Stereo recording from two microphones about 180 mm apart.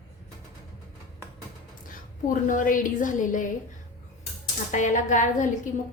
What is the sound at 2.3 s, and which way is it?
A woman's voice, 45° left (ahead or behind).